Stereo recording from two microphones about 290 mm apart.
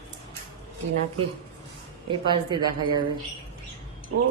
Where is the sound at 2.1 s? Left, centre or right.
Centre.